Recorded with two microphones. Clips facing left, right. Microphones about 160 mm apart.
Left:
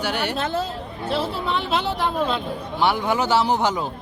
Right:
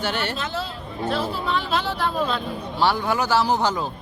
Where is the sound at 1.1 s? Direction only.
25° left (ahead or behind).